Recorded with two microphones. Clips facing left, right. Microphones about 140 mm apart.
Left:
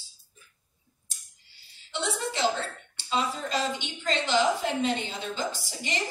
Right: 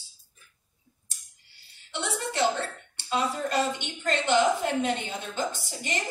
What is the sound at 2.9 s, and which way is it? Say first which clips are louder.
A woman's voice: right 1 dB; 60° right (ahead or behind).